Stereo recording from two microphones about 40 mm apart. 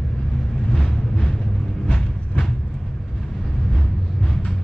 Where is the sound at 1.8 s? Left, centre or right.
Centre.